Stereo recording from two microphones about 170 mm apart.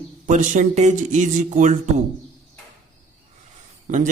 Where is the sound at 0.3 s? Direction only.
45° right (ahead or behind).